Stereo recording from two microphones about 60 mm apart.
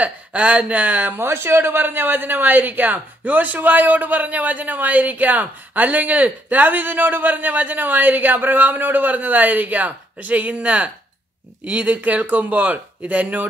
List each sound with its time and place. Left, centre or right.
0.0 s speech: right